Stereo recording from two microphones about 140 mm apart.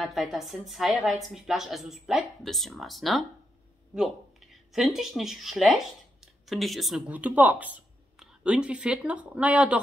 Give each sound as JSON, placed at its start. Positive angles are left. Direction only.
{"t": 0.0, "sound": "a woman's voice", "side_deg": 0}